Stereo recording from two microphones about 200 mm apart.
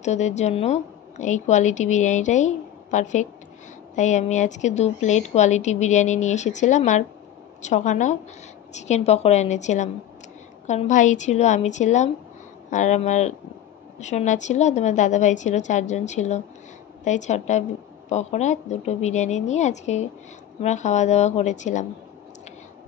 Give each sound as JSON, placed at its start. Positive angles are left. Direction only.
{"t": 0.0, "sound": "a woman's voice", "side_deg": 35}